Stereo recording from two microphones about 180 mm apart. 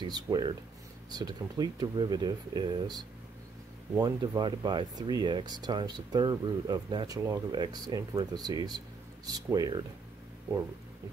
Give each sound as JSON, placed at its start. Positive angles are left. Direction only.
{"t": 0.0, "sound": "speech", "side_deg": -25}